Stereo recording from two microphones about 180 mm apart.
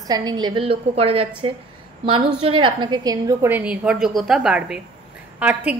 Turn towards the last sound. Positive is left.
turn(degrees=-10)  # may be behind; listen again after turning